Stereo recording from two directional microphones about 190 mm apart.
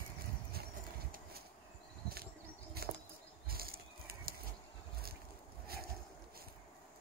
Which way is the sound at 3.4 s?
50° right (ahead or behind).